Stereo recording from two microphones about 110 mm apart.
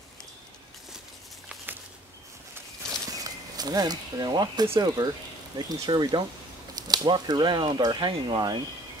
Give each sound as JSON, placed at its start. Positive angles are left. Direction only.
{"t": 3.1, "sound": "speech", "side_deg": -35}